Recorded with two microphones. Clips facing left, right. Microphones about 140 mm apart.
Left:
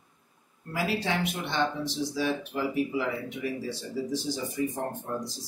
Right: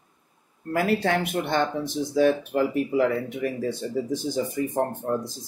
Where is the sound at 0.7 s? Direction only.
55° right (ahead or behind).